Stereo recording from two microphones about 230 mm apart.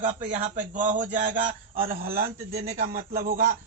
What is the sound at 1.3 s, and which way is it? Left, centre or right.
Speech, right.